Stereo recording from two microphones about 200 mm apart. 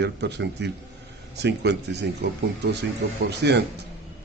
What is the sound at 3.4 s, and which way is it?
Speech, 55° right (ahead or behind).